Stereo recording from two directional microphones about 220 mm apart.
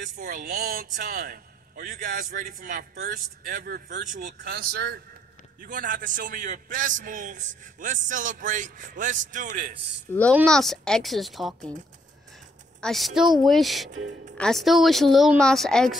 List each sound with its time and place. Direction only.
0.0 s a man's voice: 35° right (ahead or behind)
10.3 s speech: centre (ahead or behind)
12.8 s speech: centre (ahead or behind)